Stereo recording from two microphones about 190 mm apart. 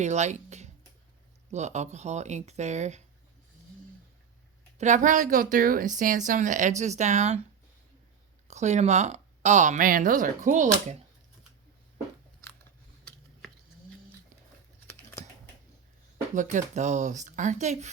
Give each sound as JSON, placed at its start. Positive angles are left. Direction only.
{"t": 0.0, "sound": "a woman's voice", "side_deg": -35}
{"t": 4.8, "sound": "a woman's voice", "side_deg": -40}
{"t": 8.4, "sound": "a woman's voice", "side_deg": -35}
{"t": 16.3, "sound": "a woman's voice", "side_deg": -40}